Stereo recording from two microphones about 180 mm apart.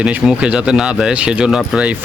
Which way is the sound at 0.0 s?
5° right (ahead or behind).